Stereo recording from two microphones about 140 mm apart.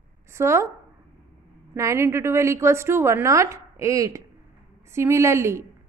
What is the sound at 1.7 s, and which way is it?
A woman's voice, 20° right (ahead or behind).